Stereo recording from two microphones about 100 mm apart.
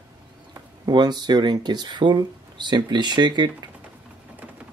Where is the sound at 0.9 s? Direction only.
45° right (ahead or behind).